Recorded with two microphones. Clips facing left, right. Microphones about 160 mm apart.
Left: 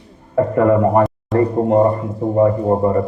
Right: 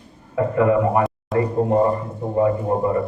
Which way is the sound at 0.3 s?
45° left (ahead or behind).